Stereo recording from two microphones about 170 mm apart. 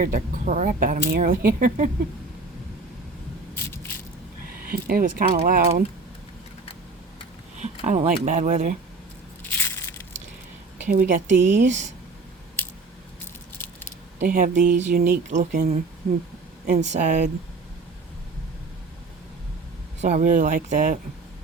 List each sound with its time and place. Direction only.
0.0 s speech: 50° right (ahead or behind)
3.5 s spray: 15° left (ahead or behind)
4.4 s speech: 60° right (ahead or behind)
7.6 s speech: 40° right (ahead or behind)
9.4 s crushing: 15° left (ahead or behind)
10.8 s speech: 55° right (ahead or behind)
14.2 s speech: 55° right (ahead or behind)
20.0 s speech: 45° right (ahead or behind)